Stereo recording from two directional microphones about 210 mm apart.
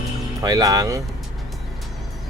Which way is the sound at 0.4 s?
15° right (ahead or behind).